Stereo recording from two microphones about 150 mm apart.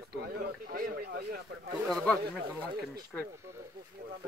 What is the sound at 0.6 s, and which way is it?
Speech, 80° right.